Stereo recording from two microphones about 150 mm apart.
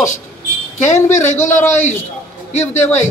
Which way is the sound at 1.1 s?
50° left (ahead or behind).